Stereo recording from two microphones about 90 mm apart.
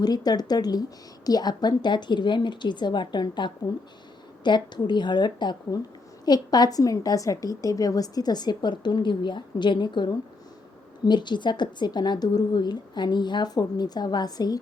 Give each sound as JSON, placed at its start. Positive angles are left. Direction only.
{"t": 0.0, "sound": "a woman's voice", "side_deg": 45}